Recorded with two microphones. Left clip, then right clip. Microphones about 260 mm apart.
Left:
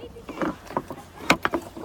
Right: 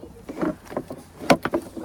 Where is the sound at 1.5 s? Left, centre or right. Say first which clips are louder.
Right 2 dB; centre.